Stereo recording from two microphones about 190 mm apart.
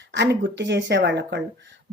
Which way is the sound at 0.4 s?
65° right (ahead or behind).